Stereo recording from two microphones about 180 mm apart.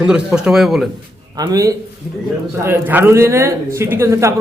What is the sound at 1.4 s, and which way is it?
A man's voice, 20° right (ahead or behind).